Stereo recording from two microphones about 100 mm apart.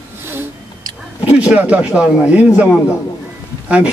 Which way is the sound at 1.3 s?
15° right (ahead or behind).